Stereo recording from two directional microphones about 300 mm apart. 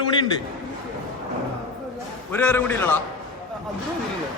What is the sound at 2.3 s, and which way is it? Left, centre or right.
Speech, centre.